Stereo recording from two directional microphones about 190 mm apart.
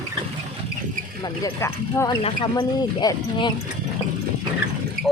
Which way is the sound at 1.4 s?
15° left (ahead or behind).